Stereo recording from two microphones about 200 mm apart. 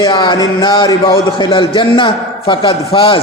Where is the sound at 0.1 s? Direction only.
20° left (ahead or behind).